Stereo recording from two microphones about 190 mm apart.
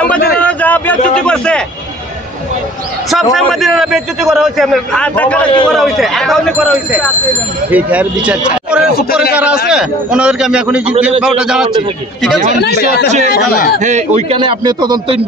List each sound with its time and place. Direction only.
0.4 s a sound: 5° left (ahead or behind)
3.1 s a man's voice: centre (ahead or behind)
12.5 s speech: 60° left (ahead or behind)
13.7 s speech: 40° right (ahead or behind)
14.4 s speech: 25° right (ahead or behind)